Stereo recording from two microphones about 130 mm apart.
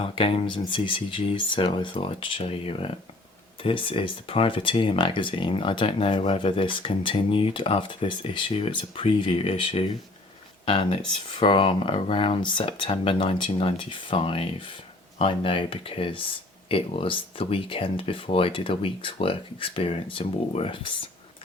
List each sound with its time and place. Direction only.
0.0 s speech: 45° left (ahead or behind)